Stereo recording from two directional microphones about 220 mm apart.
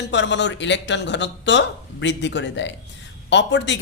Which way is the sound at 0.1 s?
55° left (ahead or behind).